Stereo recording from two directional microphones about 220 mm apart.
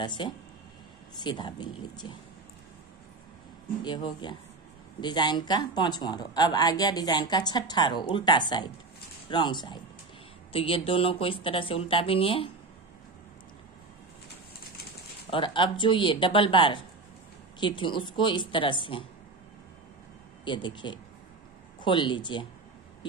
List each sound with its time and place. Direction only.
0.0 s speech: 20° left (ahead or behind)
3.8 s speech: 20° left (ahead or behind)
15.3 s speech: 20° left (ahead or behind)
20.4 s speech: 20° left (ahead or behind)